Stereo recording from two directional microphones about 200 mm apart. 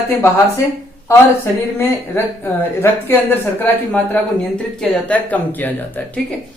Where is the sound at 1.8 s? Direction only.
10° left (ahead or behind).